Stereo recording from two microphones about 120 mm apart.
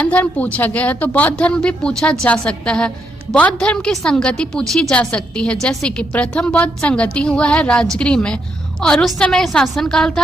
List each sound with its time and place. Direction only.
0.0 s a woman's voice: 10° left (ahead or behind)